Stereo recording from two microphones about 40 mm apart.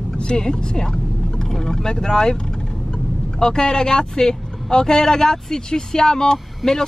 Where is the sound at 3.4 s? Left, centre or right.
Centre.